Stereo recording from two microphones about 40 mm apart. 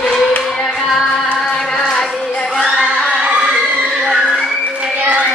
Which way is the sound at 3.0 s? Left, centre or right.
Left.